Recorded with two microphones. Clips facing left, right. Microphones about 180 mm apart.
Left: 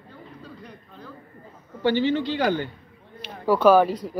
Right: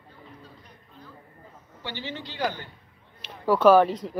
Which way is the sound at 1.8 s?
60° left (ahead or behind).